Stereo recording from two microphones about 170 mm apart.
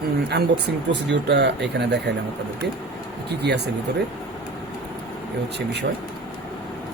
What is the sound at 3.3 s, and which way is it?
Speech, 75° right (ahead or behind).